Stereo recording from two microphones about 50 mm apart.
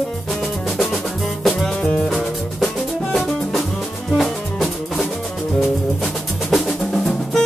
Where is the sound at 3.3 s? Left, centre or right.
Centre.